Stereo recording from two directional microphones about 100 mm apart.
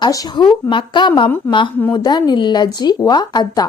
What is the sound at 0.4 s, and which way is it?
A woman's voice, 50° left (ahead or behind).